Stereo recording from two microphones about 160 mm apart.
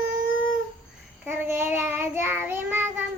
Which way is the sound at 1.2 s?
15° right (ahead or behind).